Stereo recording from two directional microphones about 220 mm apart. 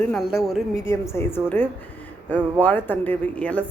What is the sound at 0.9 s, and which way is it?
Speech, 10° left (ahead or behind).